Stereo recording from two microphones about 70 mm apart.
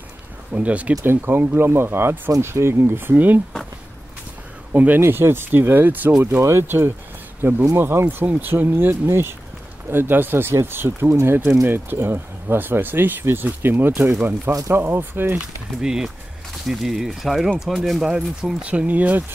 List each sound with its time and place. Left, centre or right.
0.5 s speech: centre
1.0 s speech: right
4.7 s speech: right
6.4 s speech: right
15.8 s speech: centre